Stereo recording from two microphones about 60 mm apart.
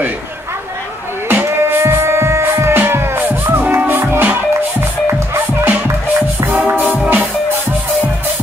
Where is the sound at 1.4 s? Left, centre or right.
Right.